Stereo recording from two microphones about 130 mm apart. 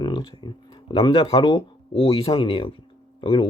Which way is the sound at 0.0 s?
40° left (ahead or behind).